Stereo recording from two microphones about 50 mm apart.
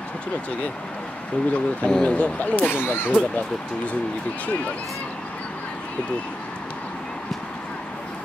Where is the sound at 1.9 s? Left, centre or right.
Left.